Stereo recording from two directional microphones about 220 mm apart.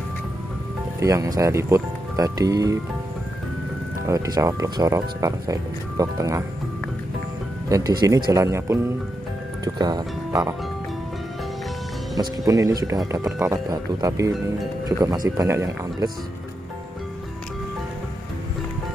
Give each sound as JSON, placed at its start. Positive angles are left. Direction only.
{"t": 0.9, "sound": "speech", "side_deg": -15}
{"t": 4.0, "sound": "speech", "side_deg": -15}
{"t": 7.7, "sound": "speech", "side_deg": -15}
{"t": 12.2, "sound": "speech", "side_deg": -15}